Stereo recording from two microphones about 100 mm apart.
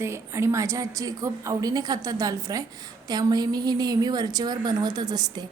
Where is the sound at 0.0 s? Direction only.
25° right (ahead or behind).